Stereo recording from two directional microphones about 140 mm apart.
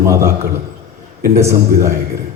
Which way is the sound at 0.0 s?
20° right (ahead or behind).